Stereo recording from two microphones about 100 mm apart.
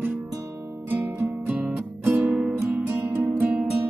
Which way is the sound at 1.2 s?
20° right (ahead or behind).